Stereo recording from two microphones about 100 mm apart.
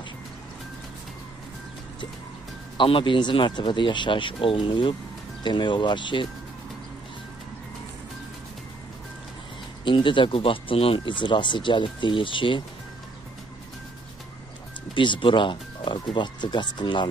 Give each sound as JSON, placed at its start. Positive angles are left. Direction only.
{"t": 2.8, "sound": "speech", "side_deg": 55}
{"t": 9.8, "sound": "speech", "side_deg": 55}
{"t": 15.0, "sound": "speech", "side_deg": 55}